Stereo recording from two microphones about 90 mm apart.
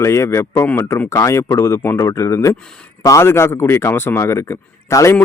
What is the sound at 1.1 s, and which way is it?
A man's voice, 35° left (ahead or behind).